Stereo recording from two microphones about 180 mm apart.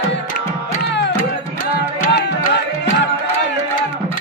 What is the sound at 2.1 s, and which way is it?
Music, 70° left (ahead or behind).